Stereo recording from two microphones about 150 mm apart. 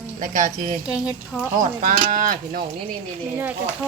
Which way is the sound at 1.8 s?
60° right (ahead or behind).